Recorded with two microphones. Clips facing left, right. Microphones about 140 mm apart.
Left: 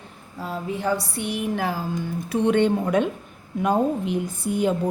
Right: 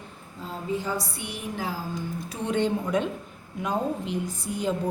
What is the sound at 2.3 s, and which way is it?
A woman's voice, 65° left (ahead or behind).